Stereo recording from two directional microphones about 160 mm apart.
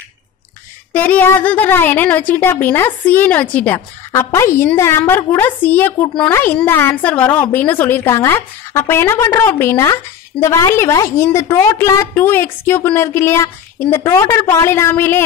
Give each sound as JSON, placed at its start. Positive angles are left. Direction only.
{"t": 0.9, "sound": "a woman's voice", "side_deg": 10}